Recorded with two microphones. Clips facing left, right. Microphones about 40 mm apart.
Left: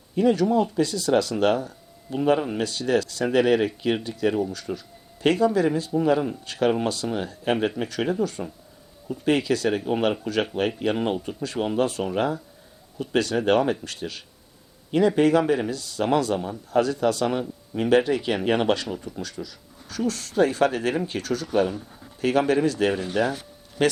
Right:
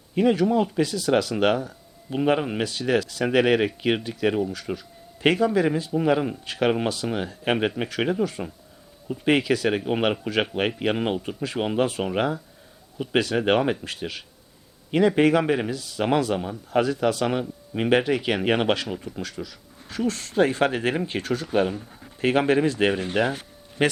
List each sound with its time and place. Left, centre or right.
0.2 s speech: right
6.4 s speech: right
10.9 s speech: centre
11.3 s speech: right